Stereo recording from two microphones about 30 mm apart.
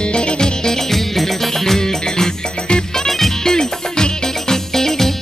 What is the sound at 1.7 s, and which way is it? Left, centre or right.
Music, left.